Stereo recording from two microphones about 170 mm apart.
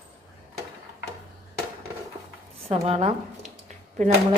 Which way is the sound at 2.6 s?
35° right (ahead or behind).